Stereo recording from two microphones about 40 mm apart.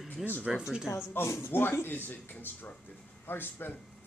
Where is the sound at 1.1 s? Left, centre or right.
Left.